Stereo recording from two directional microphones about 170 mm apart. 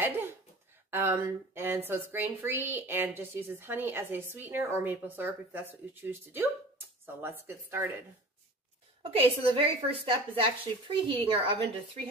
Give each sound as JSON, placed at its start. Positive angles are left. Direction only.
{"t": 0.0, "sound": "a sound", "side_deg": -15}
{"t": 0.8, "sound": "speech", "side_deg": -15}
{"t": 9.1, "sound": "a woman's voice", "side_deg": -35}